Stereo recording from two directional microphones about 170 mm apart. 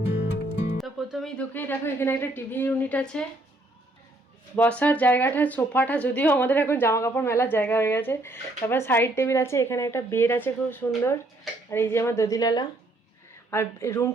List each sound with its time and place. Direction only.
0.8 s a woman's voice: centre (ahead or behind)
4.8 s a woman's voice: 10° left (ahead or behind)